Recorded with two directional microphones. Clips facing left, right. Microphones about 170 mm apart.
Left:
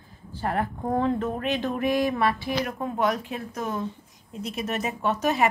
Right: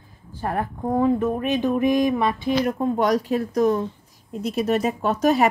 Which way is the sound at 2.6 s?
35° right (ahead or behind).